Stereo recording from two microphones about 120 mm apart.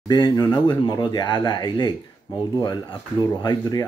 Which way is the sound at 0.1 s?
40° left (ahead or behind).